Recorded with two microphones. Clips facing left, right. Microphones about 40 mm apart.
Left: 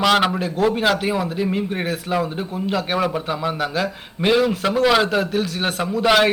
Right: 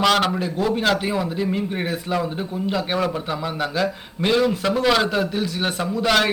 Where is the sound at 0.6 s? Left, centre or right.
Centre.